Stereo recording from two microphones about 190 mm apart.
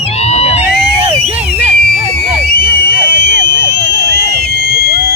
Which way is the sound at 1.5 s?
55° left (ahead or behind).